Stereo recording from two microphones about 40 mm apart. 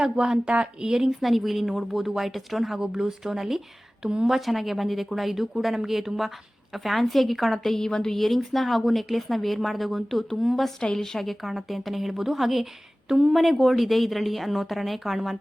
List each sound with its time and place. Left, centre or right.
0.0 s speech: right
1.1 s a woman's voice: centre
8.1 s a woman's voice: centre
10.8 s a woman's voice: centre
13.3 s a woman's voice: centre